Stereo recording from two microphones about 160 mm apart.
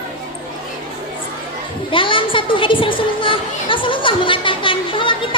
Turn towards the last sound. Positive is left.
turn(degrees=30)  # may be behind; listen again after turning